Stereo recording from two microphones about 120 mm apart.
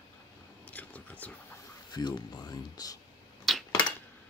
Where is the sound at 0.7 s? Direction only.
15° left (ahead or behind).